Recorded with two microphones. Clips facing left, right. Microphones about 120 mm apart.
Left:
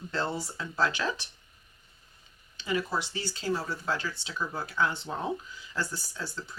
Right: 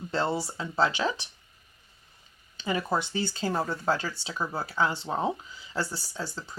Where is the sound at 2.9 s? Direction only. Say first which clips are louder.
Right 5 dB; 50° right (ahead or behind).